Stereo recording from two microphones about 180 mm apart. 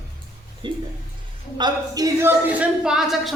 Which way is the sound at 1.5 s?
20° right (ahead or behind).